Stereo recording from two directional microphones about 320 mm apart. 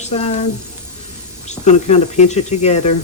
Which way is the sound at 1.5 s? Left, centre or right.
Left.